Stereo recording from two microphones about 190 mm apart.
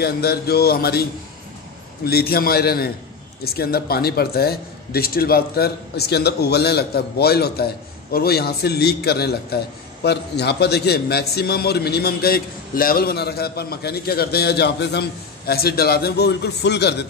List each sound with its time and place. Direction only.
0.0 s a man's voice: 55° left (ahead or behind)
2.0 s a man's voice: 55° left (ahead or behind)